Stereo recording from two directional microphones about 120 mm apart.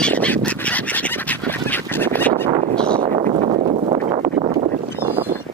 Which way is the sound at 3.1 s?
75° right (ahead or behind).